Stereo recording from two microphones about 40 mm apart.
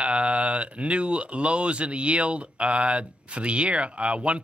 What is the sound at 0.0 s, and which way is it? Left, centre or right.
Speech, right.